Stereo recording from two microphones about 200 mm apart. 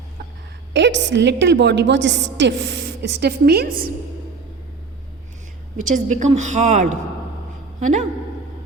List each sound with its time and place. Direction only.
0.7 s a woman's voice: 60° right (ahead or behind)
5.7 s a woman's voice: 40° right (ahead or behind)